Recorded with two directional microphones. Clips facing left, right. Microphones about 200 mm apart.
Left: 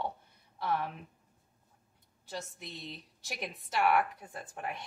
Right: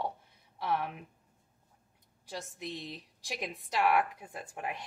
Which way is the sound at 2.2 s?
15° right (ahead or behind).